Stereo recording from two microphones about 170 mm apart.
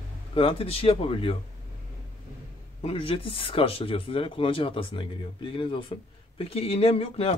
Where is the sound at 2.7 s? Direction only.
35° left (ahead or behind).